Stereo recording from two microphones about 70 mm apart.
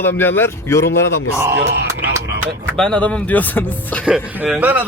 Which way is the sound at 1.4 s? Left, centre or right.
Right.